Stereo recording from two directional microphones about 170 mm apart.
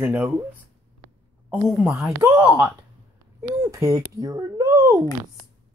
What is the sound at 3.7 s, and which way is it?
A child's voice, 20° right (ahead or behind).